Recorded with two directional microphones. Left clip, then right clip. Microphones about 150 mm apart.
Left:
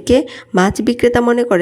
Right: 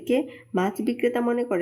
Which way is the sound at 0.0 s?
30° left (ahead or behind).